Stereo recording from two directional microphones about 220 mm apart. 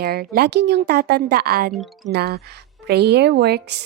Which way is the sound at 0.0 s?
45° right (ahead or behind).